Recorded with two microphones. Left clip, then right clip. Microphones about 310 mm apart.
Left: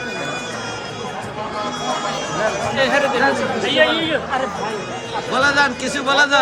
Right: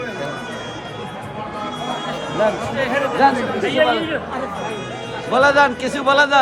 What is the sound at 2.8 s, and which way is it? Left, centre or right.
Speech, left.